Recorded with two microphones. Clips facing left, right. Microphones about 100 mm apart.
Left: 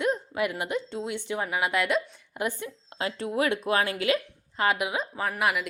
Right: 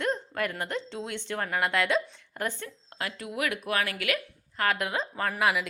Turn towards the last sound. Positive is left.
turn(degrees=5)  # may be behind; listen again after turning